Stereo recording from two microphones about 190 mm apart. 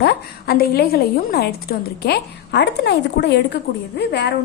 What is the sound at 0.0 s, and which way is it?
Speech, 55° left (ahead or behind).